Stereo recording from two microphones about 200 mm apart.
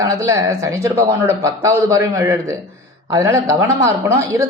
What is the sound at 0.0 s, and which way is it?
A woman's voice, 15° right (ahead or behind).